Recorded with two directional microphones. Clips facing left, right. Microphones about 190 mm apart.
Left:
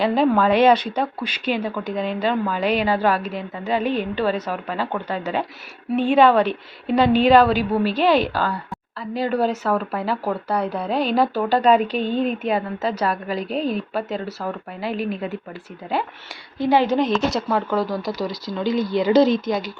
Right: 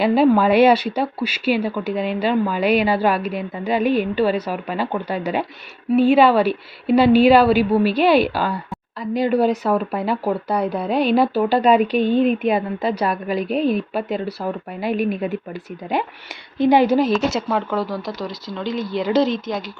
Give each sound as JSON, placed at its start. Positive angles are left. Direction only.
{"t": 0.0, "sound": "speech", "side_deg": -10}